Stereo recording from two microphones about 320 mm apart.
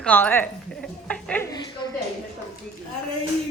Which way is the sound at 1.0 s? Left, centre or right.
Centre.